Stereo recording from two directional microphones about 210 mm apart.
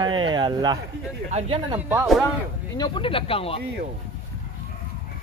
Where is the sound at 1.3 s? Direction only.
30° right (ahead or behind).